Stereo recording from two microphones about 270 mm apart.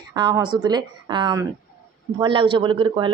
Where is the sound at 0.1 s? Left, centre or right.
Centre.